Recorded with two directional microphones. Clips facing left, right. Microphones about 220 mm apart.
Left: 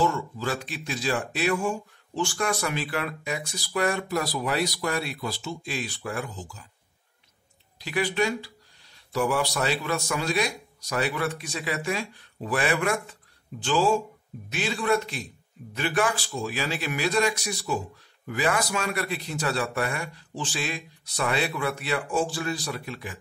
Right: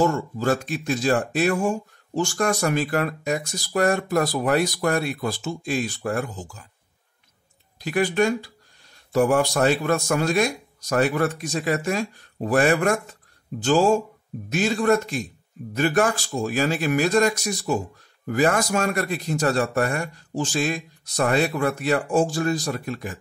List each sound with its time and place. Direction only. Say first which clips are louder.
0.0 s speech: right 5 dB; 45° right (ahead or behind)
7.8 s speech: right 5 dB; 45° right (ahead or behind)